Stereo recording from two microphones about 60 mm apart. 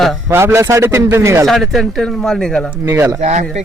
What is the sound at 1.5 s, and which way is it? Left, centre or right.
A man's voice, centre.